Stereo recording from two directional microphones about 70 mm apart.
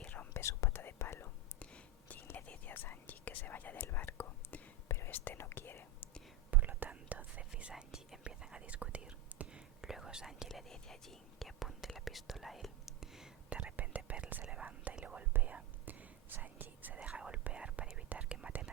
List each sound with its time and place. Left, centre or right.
0.0 s whispering: left
0.3 s whispering: left
1.5 s whispering: left
5.1 s speech: left
6.5 s whispering: right
7.5 s whispering: centre
10.5 s whispering: centre